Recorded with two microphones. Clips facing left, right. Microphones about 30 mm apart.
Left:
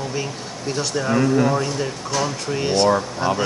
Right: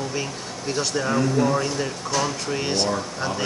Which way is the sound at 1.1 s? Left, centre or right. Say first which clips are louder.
Left 4 dB; centre.